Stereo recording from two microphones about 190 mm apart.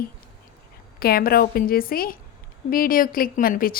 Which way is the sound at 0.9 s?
50° left (ahead or behind).